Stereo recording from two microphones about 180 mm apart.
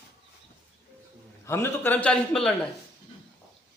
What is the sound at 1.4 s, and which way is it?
A man's voice, 15° left (ahead or behind).